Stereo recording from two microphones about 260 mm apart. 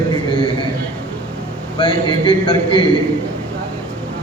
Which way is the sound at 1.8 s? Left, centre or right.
Centre.